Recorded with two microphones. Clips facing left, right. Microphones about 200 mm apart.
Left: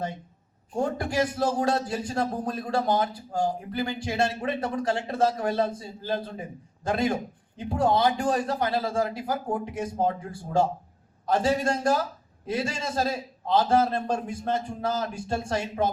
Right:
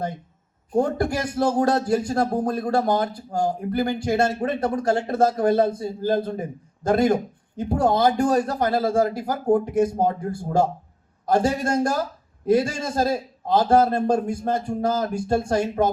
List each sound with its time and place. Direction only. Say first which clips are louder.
0.7 s speech: right 6 dB; 40° right (ahead or behind)